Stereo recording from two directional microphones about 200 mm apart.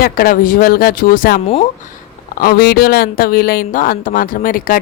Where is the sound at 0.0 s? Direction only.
45° left (ahead or behind).